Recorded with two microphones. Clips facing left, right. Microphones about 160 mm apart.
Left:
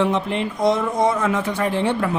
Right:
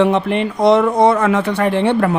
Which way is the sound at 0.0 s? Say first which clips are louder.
Right 6 dB; 65° right (ahead or behind).